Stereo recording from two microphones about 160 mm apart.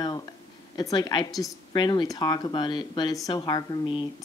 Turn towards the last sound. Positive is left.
turn(degrees=30)  # may be behind; listen again after turning